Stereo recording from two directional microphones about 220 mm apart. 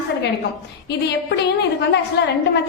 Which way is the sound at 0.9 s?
50° left (ahead or behind).